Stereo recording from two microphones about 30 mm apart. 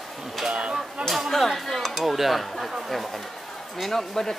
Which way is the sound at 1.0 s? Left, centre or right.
Centre.